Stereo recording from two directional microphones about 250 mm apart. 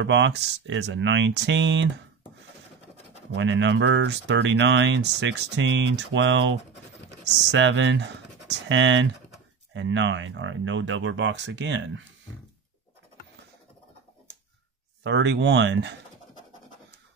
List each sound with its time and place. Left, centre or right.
0.0 s speech: right
3.3 s speech: right
7.5 s speech: right
15.0 s speech: right